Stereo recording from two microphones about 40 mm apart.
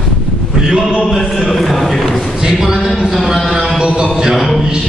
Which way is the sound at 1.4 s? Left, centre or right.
Centre.